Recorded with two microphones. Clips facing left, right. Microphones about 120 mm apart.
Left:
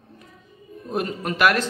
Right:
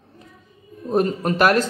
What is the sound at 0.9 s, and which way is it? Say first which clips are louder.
Speech: right 6 dB; 35° right (ahead or behind).